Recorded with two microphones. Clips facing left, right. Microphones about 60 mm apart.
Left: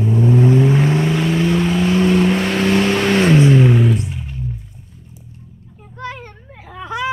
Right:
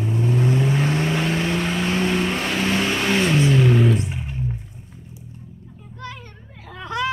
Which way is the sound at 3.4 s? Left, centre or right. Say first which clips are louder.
Left 6 dB; left.